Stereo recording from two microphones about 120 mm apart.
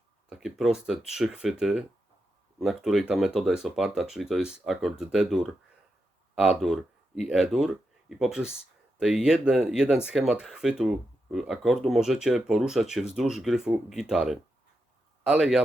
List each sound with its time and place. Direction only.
0.3 s speech: 5° right (ahead or behind)